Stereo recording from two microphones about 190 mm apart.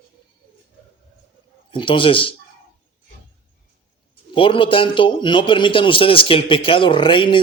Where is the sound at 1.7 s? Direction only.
25° left (ahead or behind).